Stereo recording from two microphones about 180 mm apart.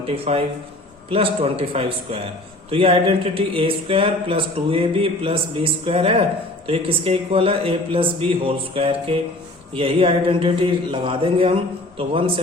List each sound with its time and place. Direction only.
0.3 s speech: 35° right (ahead or behind)